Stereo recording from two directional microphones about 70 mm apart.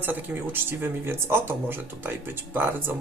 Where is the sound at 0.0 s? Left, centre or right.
Right.